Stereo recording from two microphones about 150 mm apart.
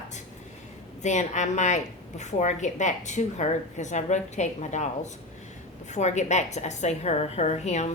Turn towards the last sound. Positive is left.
turn(degrees=50)  # may be behind; listen again after turning